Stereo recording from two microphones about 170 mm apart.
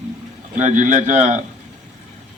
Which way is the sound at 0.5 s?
45° right (ahead or behind).